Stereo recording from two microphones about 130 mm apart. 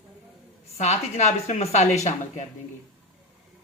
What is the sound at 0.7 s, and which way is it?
Speech, 60° left (ahead or behind).